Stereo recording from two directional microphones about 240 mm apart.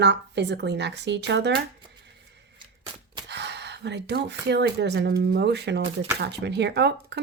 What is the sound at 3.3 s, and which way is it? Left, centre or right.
Speech, right.